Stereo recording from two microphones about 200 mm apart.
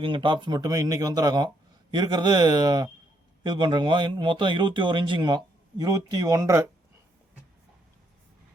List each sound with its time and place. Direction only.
0.0 s a man's voice: 25° right (ahead or behind)